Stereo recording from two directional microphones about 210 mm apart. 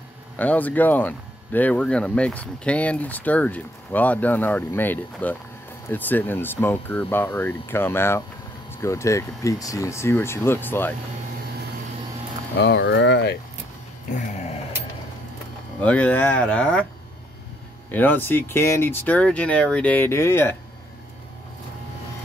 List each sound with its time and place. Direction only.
0.4 s speech: 5° left (ahead or behind)
12.5 s speech: 55° left (ahead or behind)
15.8 s speech: 5° left (ahead or behind)
17.9 s speech: 10° left (ahead or behind)